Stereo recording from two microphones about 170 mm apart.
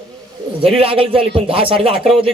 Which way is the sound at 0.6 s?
35° right (ahead or behind).